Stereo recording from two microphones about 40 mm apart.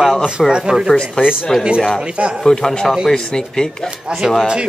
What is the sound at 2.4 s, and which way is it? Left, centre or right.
Speech, centre.